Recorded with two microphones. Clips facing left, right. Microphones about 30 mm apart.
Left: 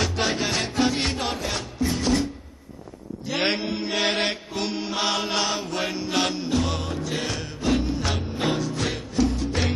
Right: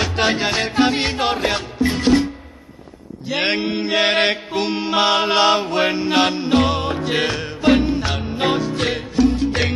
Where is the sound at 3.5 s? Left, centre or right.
Right.